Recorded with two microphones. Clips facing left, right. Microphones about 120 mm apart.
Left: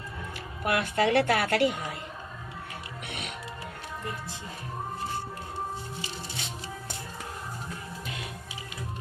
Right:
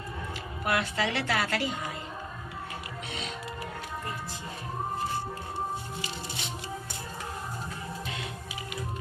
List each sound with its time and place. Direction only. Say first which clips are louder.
0.7 s a woman's voice: left 5 dB; 50° left (ahead or behind)
3.1 s music: right 1 dB; 65° left (ahead or behind)